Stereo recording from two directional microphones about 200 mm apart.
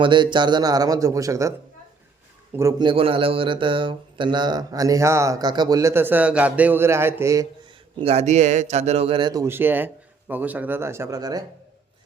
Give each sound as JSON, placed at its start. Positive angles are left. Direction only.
{"t": 0.0, "sound": "a man's voice", "side_deg": -25}
{"t": 2.6, "sound": "a man's voice", "side_deg": -20}
{"t": 8.0, "sound": "a man's voice", "side_deg": -35}